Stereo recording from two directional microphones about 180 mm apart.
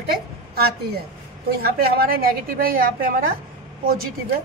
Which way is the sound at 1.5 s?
55° right (ahead or behind).